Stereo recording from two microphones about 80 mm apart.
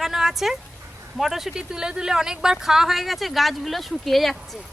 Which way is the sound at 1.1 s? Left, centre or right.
Centre.